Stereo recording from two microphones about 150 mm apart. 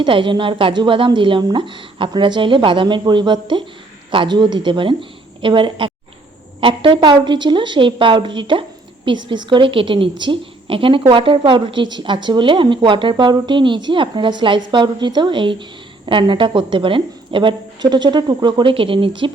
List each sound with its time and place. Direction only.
0.0 s a woman's voice: 35° right (ahead or behind)